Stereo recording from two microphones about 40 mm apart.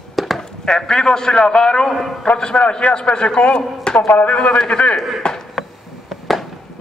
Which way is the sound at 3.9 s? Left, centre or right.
Left.